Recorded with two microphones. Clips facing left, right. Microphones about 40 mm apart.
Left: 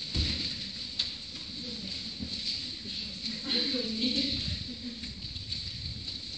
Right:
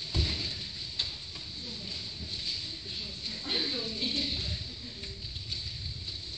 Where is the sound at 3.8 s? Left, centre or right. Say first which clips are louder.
Left 2 dB; right.